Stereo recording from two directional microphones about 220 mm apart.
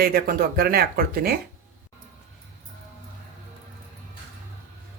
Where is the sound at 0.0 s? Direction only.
45° right (ahead or behind).